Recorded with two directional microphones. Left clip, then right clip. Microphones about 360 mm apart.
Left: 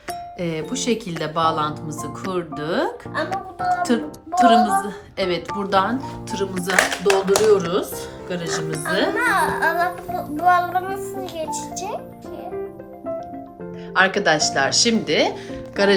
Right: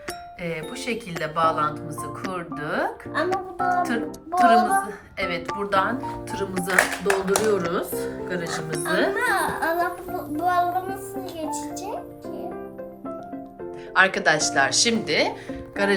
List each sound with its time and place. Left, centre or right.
0.1 s speech: centre
13.9 s speech: centre